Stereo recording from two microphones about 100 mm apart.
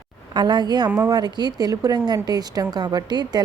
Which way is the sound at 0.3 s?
45° right (ahead or behind).